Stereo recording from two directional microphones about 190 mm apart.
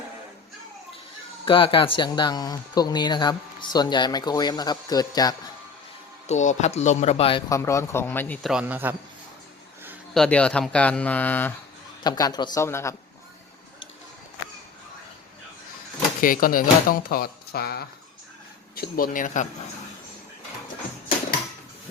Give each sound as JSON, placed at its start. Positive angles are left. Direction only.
{"t": 1.5, "sound": "speech", "side_deg": 25}
{"t": 6.2, "sound": "speech", "side_deg": 40}
{"t": 7.5, "sound": "speech", "side_deg": 15}
{"t": 8.4, "sound": "a man's voice", "side_deg": -5}
{"t": 10.2, "sound": "speech", "side_deg": 5}
{"t": 12.0, "sound": "speech", "side_deg": 20}
{"t": 16.2, "sound": "speech", "side_deg": 50}